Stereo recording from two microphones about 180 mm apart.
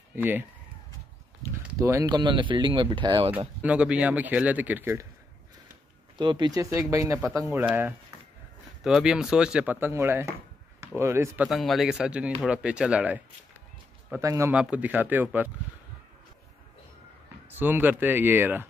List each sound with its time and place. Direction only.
0.1 s speech: 10° right (ahead or behind)
1.8 s speech: 15° right (ahead or behind)
3.3 s speech: 10° right (ahead or behind)
6.1 s speech: 25° right (ahead or behind)
11.4 s speech: centre (ahead or behind)
17.5 s speech: 10° right (ahead or behind)